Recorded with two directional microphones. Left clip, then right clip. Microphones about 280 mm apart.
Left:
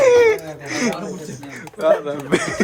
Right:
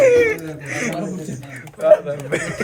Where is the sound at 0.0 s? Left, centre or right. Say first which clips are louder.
Left 1 dB; centre.